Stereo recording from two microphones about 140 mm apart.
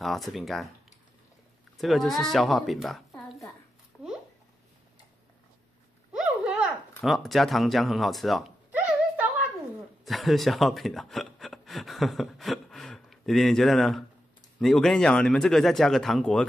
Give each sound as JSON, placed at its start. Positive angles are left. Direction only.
{"t": 0.0, "sound": "speech", "side_deg": 0}
{"t": 1.8, "sound": "speech", "side_deg": 0}
{"t": 6.1, "sound": "a sound", "side_deg": -5}
{"t": 7.0, "sound": "speech", "side_deg": 0}
{"t": 8.7, "sound": "a sound", "side_deg": -10}
{"t": 10.0, "sound": "speech", "side_deg": 0}